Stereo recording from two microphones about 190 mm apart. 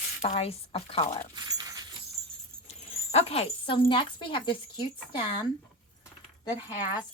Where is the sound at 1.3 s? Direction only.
20° right (ahead or behind).